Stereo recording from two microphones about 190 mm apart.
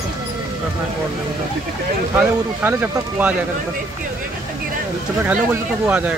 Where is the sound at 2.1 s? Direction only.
10° right (ahead or behind).